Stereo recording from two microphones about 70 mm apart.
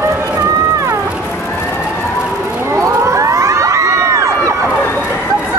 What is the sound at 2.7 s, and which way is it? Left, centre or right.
Crowd, right.